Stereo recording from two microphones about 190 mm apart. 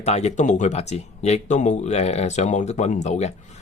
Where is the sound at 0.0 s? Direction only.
35° left (ahead or behind).